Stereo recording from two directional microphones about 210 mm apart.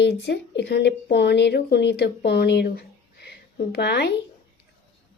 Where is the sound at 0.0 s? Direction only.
55° left (ahead or behind).